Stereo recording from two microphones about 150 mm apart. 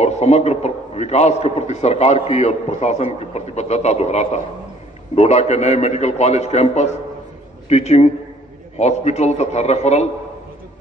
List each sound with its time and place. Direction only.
0.0 s a man's voice: 45° left (ahead or behind)